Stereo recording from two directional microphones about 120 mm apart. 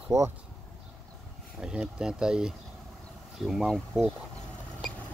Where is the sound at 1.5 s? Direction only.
5° right (ahead or behind).